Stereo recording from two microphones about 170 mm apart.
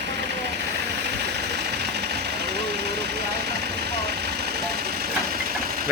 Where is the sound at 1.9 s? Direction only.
75° right (ahead or behind).